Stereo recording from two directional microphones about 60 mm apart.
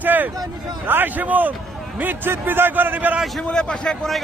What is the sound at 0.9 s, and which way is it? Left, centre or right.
A man's voice, right.